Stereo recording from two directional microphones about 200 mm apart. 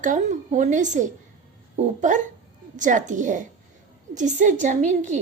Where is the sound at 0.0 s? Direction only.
40° right (ahead or behind).